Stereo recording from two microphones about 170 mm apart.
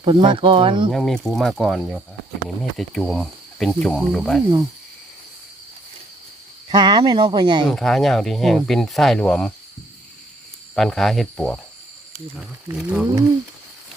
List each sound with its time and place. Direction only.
0.0 s speech: 30° right (ahead or behind)
0.9 s speech: centre (ahead or behind)
6.7 s speech: 25° right (ahead or behind)
7.6 s speech: centre (ahead or behind)
10.8 s speech: centre (ahead or behind)